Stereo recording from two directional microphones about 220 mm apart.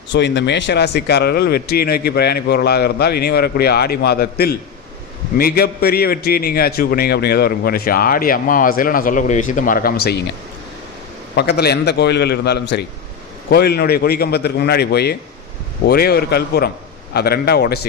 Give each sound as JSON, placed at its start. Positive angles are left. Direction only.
{"t": 0.1, "sound": "a man's voice", "side_deg": 55}
{"t": 11.3, "sound": "a man's voice", "side_deg": 50}